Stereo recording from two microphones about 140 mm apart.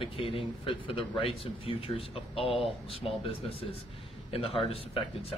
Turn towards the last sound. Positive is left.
turn(degrees=45)  # may be behind; listen again after turning